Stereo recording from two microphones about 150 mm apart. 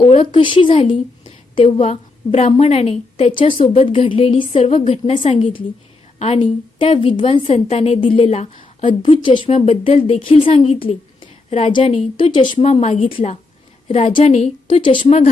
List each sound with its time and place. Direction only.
0.0 s a woman's voice: 35° left (ahead or behind)
12.2 s a woman's voice: 35° left (ahead or behind)